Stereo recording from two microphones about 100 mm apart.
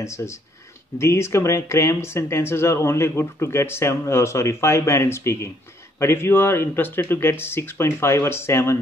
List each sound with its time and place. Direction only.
0.0 s speech: 30° left (ahead or behind)